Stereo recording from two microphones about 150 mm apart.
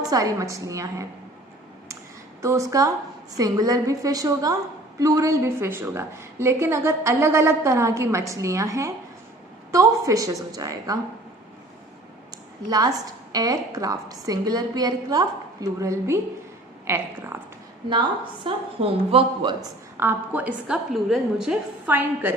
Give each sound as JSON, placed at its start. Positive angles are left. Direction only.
{"t": 0.0, "sound": "a woman's voice", "side_deg": -25}
{"t": 2.4, "sound": "a woman's voice", "side_deg": -20}
{"t": 12.6, "sound": "a woman's voice", "side_deg": -25}
{"t": 17.8, "sound": "a woman's voice", "side_deg": -30}
{"t": 20.0, "sound": "a woman's voice", "side_deg": -15}